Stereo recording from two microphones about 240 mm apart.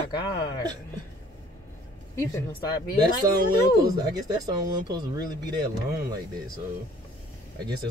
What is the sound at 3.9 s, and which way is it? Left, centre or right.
Speech, centre.